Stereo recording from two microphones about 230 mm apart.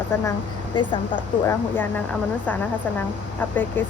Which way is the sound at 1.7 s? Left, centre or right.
Centre.